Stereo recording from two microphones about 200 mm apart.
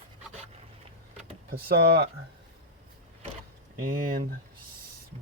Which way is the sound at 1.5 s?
55° right (ahead or behind).